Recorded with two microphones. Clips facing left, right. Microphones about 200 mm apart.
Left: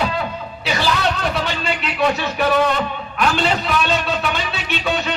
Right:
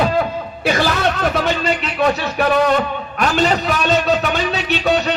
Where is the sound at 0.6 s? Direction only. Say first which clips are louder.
Right 5 dB; 50° right (ahead or behind).